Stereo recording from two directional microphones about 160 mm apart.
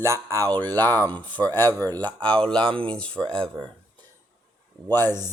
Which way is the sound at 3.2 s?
35° right (ahead or behind).